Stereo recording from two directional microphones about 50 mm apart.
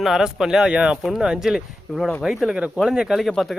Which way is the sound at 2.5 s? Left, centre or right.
Right.